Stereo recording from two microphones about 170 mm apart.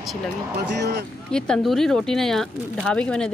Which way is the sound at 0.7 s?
75° right (ahead or behind).